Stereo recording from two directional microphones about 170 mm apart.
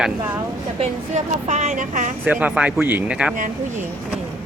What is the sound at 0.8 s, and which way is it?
Speech, 40° right (ahead or behind).